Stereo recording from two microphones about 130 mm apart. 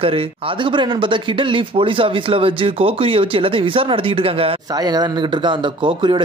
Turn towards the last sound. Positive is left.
turn(degrees=-40)  # may be behind; listen again after turning